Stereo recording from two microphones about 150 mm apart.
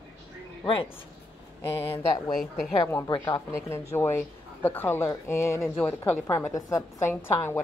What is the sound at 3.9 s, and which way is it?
A woman's voice, 15° left (ahead or behind).